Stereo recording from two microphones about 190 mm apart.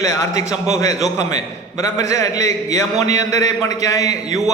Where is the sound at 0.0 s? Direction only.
15° left (ahead or behind).